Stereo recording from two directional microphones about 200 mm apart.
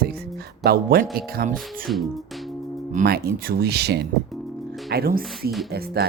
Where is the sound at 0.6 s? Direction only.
50° right (ahead or behind).